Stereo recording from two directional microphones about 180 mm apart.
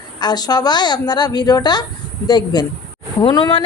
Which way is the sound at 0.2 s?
20° left (ahead or behind).